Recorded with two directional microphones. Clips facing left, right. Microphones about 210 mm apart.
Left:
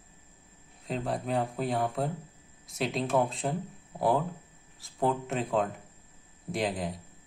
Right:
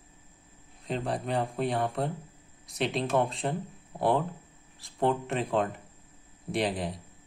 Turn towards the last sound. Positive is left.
turn(degrees=0)  # may be behind; listen again after turning